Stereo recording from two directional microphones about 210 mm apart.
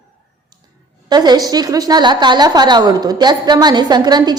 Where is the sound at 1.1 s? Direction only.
20° right (ahead or behind).